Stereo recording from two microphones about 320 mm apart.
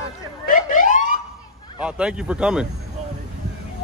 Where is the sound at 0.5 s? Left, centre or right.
Left.